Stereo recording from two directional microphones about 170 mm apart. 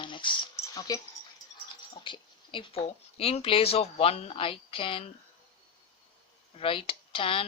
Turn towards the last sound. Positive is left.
turn(degrees=30)  # may be behind; listen again after turning